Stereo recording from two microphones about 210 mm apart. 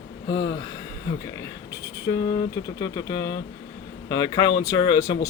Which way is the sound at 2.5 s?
15° left (ahead or behind).